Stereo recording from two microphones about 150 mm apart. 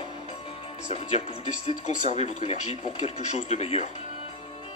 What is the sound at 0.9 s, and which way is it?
Speech, 45° left (ahead or behind).